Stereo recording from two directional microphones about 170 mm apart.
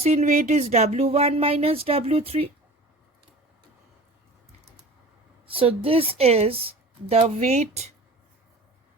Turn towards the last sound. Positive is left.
turn(degrees=-40)  # may be behind; listen again after turning